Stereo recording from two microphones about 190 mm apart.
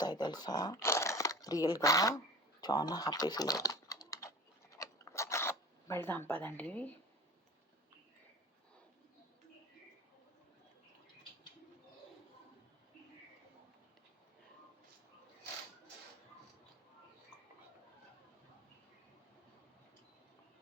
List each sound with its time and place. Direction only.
0.0 s speech: 20° left (ahead or behind)
4.7 s scissors: 15° left (ahead or behind)